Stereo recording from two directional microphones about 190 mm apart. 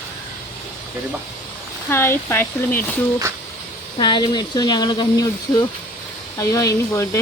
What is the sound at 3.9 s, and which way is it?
Speech, 25° left (ahead or behind).